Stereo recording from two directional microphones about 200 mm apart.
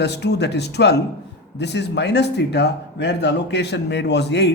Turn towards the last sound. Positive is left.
turn(degrees=60)  # may be behind; listen again after turning